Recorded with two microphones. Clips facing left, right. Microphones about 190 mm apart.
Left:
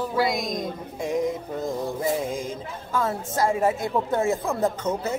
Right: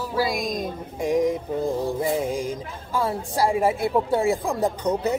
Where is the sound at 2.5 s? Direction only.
10° right (ahead or behind).